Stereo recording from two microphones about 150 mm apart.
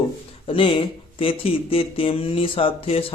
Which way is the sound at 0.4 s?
35° left (ahead or behind).